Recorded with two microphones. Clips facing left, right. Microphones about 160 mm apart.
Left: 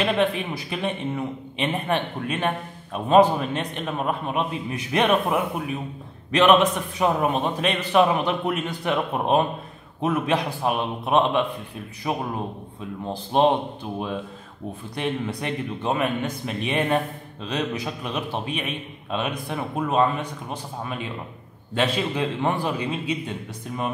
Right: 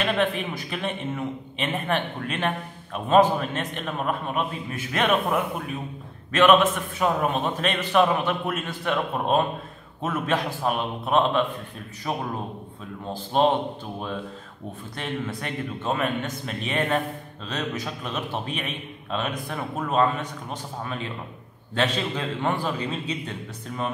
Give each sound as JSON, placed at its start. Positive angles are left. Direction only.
{"t": 0.0, "sound": "a man's voice", "side_deg": 15}
{"t": 6.3, "sound": "a man's voice", "side_deg": 15}
{"t": 15.0, "sound": "a man's voice", "side_deg": 15}